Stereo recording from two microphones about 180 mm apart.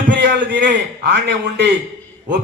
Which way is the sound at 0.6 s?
65° right (ahead or behind).